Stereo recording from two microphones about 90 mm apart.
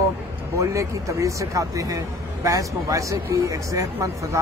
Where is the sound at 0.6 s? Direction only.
35° right (ahead or behind).